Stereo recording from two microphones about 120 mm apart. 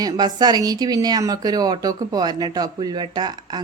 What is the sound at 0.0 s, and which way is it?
A woman's voice, 35° right (ahead or behind).